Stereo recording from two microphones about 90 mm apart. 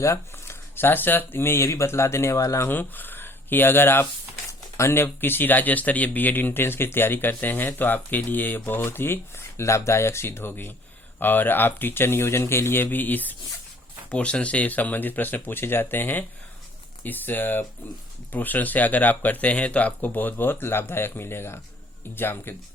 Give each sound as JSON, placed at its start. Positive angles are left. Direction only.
{"t": 0.0, "sound": "speech", "side_deg": 30}
{"t": 2.6, "sound": "speech", "side_deg": 20}